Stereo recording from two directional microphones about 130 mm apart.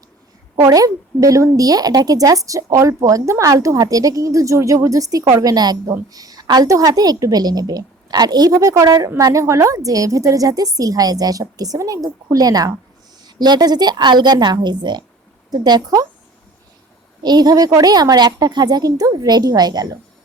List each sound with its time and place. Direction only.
0.5 s a woman's voice: 25° right (ahead or behind)
17.2 s a woman's voice: 30° right (ahead or behind)